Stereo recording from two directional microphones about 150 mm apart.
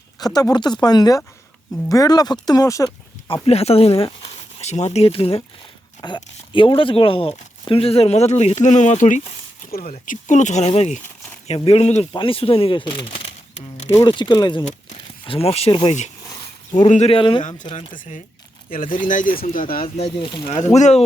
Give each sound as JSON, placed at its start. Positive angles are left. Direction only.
{"t": 0.2, "sound": "speech", "side_deg": 25}
{"t": 3.2, "sound": "speech", "side_deg": 35}
{"t": 4.6, "sound": "speech", "side_deg": 50}
{"t": 6.0, "sound": "speech", "side_deg": 25}
{"t": 12.1, "sound": "speech", "side_deg": 35}
{"t": 13.6, "sound": "a sound", "side_deg": 50}
{"t": 14.1, "sound": "speech", "side_deg": 30}
{"t": 15.3, "sound": "speech", "side_deg": 40}
{"t": 16.2, "sound": "a sound", "side_deg": 25}
{"t": 16.9, "sound": "speech", "side_deg": 45}
{"t": 17.2, "sound": "speech", "side_deg": 35}
{"t": 18.7, "sound": "speech", "side_deg": 65}
{"t": 20.1, "sound": "speech", "side_deg": 35}
{"t": 20.7, "sound": "speech", "side_deg": 50}